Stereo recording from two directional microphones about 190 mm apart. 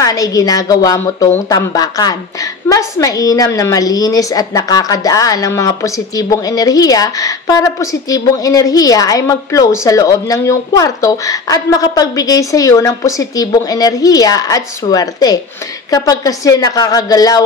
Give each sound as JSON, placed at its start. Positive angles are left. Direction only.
{"t": 0.0, "sound": "a woman's voice", "side_deg": 20}